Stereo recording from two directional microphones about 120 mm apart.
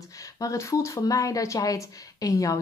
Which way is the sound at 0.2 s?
25° left (ahead or behind).